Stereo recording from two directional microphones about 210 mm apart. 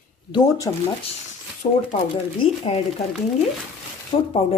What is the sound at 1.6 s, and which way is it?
A woman's voice, 35° left (ahead or behind).